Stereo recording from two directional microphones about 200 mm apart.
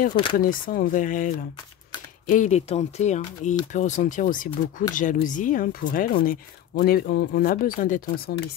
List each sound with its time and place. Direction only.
0.1 s speech: 25° left (ahead or behind)
0.4 s speech: 45° left (ahead or behind)